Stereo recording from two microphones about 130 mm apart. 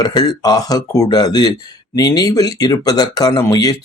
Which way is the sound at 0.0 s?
30° left (ahead or behind).